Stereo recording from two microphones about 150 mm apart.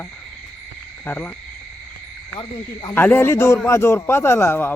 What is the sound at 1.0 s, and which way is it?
Frog, 15° left (ahead or behind).